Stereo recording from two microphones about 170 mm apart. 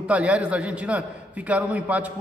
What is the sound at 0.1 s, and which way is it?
A man's voice, 5° right (ahead or behind).